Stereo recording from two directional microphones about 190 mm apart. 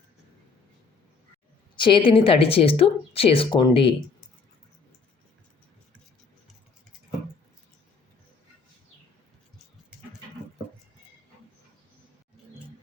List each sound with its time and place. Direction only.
1.7 s a woman's voice: 25° left (ahead or behind)